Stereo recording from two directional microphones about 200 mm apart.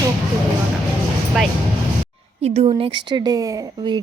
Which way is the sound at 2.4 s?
30° right (ahead or behind).